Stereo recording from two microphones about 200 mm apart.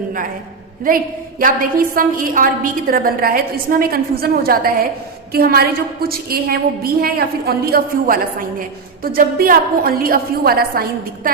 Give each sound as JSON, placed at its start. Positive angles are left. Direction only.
{"t": 0.9, "sound": "a woman's voice", "side_deg": -45}